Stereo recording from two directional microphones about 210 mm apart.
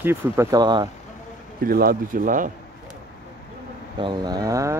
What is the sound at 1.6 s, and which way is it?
Speech, 45° right (ahead or behind).